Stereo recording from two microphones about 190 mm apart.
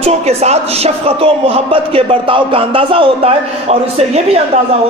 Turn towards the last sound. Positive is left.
turn(degrees=-35)  # may be behind; listen again after turning